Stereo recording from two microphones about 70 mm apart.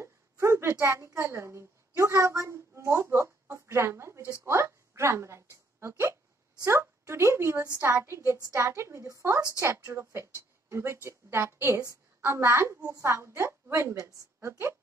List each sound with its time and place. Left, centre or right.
0.0 s a woman's voice: right